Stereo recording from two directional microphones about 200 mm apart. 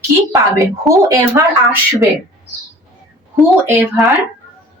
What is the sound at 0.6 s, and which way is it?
Speech, 15° right (ahead or behind).